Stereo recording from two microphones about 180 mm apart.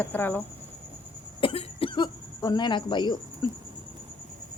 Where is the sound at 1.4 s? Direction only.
30° left (ahead or behind).